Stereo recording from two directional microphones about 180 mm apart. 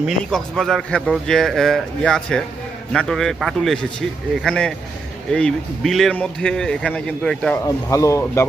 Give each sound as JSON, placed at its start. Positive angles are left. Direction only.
{"t": 0.0, "sound": "a man's voice", "side_deg": 0}
{"t": 7.6, "sound": "speech", "side_deg": 15}